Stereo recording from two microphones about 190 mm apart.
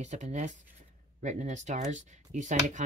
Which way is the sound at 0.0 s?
40° right (ahead or behind).